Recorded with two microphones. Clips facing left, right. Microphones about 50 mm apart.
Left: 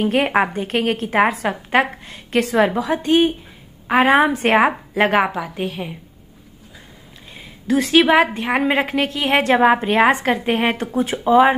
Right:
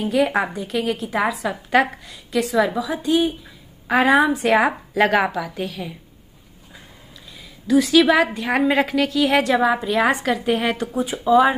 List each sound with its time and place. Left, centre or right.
0.0 s a woman's voice: left
1.7 s a woman's voice: left
2.1 s a woman's voice: left
7.3 s a sound: left
8.2 s a woman's voice: left
10.9 s a woman's voice: left